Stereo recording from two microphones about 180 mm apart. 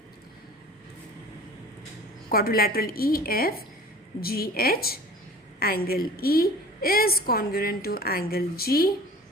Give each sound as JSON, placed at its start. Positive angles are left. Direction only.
{"t": 2.3, "sound": "a woman's voice", "side_deg": 55}